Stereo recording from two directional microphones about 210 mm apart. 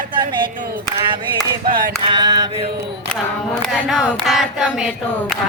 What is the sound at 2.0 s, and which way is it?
Mantra, 20° right (ahead or behind).